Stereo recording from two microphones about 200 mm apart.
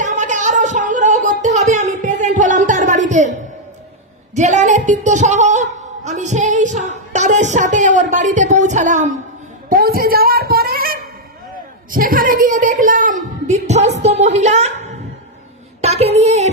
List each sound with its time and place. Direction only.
0.0 s a sound: 35° right (ahead or behind)
4.4 s a woman's voice: 35° right (ahead or behind)
15.8 s child singing: 30° right (ahead or behind)